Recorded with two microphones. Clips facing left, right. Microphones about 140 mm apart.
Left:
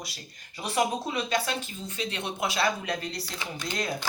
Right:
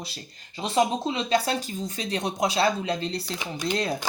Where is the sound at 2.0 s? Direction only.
40° right (ahead or behind).